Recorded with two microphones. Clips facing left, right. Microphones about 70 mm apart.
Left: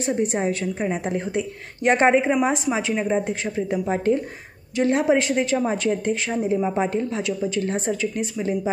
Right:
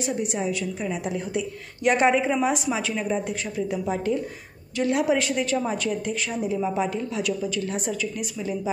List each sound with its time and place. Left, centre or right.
0.0 s speech: left